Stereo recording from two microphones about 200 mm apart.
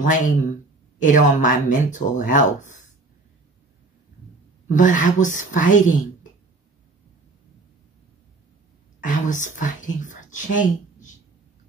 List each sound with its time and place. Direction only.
0.0 s speech: 40° left (ahead or behind)
4.6 s speech: 40° left (ahead or behind)
9.0 s speech: 40° left (ahead or behind)